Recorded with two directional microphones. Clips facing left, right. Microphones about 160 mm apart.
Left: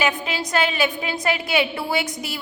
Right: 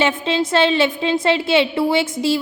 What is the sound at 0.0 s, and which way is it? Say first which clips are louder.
A woman's voice: right 6 dB; 25° right (ahead or behind).